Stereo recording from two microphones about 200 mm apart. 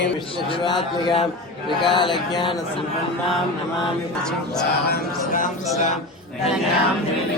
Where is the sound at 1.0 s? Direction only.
30° left (ahead or behind).